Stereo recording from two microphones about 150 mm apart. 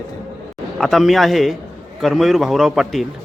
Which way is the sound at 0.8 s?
Centre (ahead or behind).